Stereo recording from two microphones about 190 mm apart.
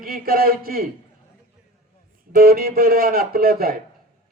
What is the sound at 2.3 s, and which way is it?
Speech, 50° right (ahead or behind).